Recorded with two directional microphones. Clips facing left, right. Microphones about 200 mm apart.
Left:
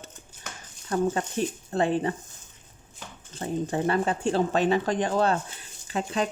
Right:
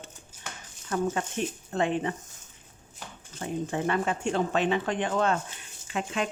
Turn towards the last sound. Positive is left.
turn(degrees=35)  # may be behind; listen again after turning